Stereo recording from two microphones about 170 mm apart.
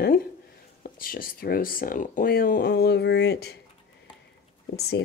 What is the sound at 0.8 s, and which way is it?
Speech, 55° left (ahead or behind).